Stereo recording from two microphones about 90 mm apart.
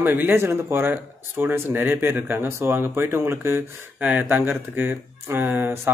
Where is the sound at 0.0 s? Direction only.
25° right (ahead or behind).